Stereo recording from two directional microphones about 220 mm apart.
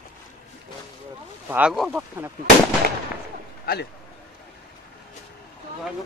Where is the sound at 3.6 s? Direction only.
45° left (ahead or behind).